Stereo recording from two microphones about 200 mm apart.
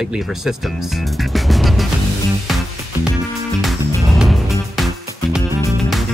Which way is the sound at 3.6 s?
Centre (ahead or behind).